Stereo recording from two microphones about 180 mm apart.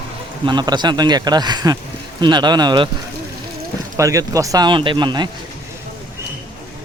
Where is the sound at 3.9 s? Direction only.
15° right (ahead or behind).